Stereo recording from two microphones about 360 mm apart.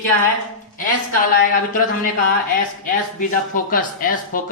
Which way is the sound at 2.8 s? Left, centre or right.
Left.